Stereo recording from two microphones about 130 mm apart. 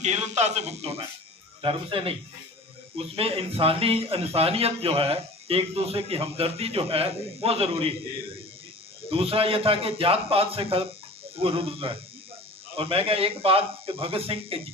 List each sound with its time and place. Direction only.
0.0 s a man's voice: 60° right (ahead or behind)
1.6 s speech: 45° right (ahead or behind)
3.2 s speech: 45° right (ahead or behind)
9.0 s speech: 45° right (ahead or behind)